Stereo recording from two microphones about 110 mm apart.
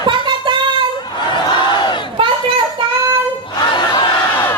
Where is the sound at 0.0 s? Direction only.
45° right (ahead or behind).